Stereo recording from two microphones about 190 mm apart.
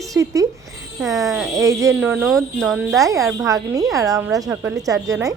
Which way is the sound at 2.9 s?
15° right (ahead or behind).